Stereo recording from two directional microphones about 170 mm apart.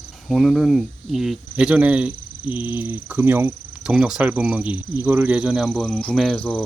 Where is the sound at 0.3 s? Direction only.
Centre (ahead or behind).